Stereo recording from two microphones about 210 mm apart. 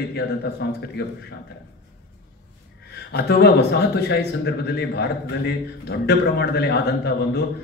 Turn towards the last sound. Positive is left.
turn(degrees=50)  # may be behind; listen again after turning